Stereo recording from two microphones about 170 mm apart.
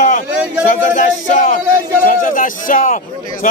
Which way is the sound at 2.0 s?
55° left (ahead or behind).